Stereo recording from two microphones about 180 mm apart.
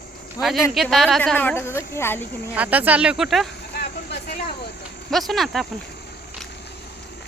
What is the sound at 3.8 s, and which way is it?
Vehicle, 60° left (ahead or behind).